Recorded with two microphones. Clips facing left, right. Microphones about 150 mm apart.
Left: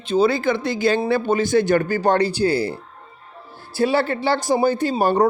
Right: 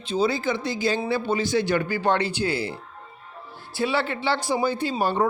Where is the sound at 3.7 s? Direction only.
40° left (ahead or behind).